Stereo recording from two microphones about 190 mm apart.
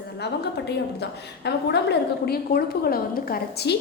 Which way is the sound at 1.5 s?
60° left (ahead or behind).